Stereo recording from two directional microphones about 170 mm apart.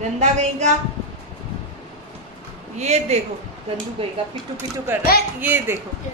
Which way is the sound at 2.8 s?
40° right (ahead or behind).